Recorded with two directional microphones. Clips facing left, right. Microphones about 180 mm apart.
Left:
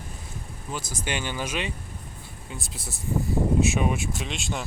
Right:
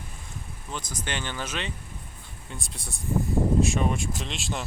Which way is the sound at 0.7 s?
10° left (ahead or behind).